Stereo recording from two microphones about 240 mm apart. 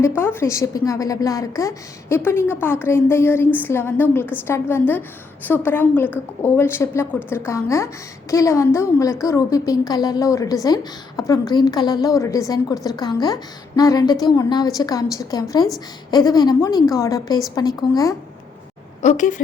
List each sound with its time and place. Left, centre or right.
0.0 s a woman's voice: centre
19.0 s a woman's voice: left